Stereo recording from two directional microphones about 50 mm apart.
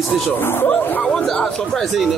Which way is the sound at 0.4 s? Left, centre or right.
Left.